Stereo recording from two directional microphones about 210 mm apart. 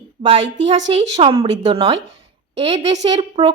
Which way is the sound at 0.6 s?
60° right (ahead or behind).